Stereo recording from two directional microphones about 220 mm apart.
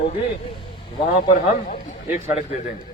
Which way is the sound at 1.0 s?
30° left (ahead or behind).